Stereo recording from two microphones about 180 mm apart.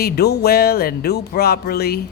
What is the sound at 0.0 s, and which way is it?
Speech, 65° left (ahead or behind).